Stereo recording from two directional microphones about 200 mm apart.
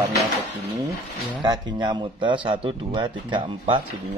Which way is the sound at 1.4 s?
20° right (ahead or behind).